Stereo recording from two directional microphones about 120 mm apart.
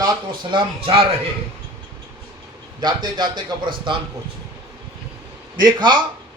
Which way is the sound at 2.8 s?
40° right (ahead or behind).